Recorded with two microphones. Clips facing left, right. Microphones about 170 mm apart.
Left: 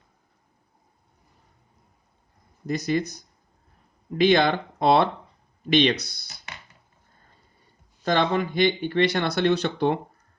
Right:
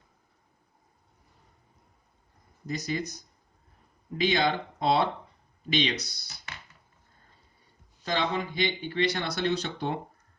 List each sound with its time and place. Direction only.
2.6 s speech: 60° left (ahead or behind)
4.2 s speech: 60° left (ahead or behind)
8.0 s speech: 55° left (ahead or behind)